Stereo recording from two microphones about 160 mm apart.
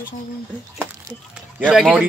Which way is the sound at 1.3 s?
5° right (ahead or behind).